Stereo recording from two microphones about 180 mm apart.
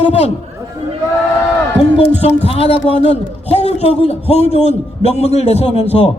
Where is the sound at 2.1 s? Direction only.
35° left (ahead or behind).